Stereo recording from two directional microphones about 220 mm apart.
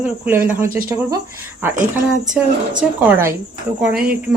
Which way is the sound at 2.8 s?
10° right (ahead or behind).